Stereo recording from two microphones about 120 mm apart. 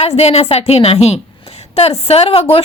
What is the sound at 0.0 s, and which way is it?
A woman's voice, 60° left (ahead or behind).